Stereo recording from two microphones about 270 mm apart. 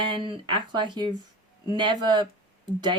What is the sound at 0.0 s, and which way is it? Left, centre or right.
Speech, centre.